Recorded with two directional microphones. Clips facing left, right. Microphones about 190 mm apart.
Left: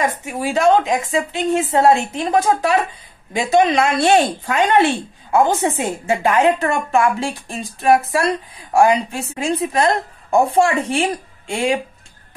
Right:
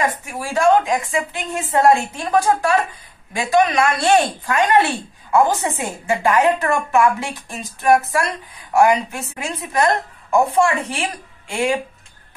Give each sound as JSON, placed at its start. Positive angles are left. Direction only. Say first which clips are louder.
{"t": 0.2, "sound": "a woman's voice", "louder": "left 2 dB", "side_deg": 20}